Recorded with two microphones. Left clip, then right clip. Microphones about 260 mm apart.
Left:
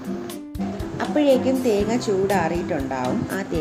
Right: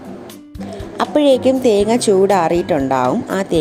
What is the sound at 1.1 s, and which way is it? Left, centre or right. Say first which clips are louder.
Speech: right 6 dB; right.